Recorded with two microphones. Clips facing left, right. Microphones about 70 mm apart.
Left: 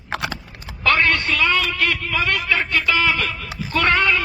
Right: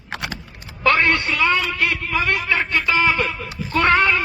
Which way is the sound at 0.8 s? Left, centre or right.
Right.